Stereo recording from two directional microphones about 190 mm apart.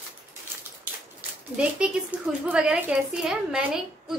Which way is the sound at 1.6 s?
5° right (ahead or behind).